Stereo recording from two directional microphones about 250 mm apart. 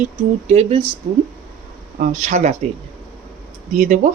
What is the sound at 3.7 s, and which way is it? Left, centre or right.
Speech, right.